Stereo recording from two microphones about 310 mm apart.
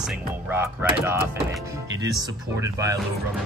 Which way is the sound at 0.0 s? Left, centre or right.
Centre.